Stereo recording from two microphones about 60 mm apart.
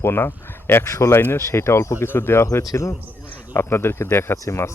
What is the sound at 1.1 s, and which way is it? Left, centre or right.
Speech, left.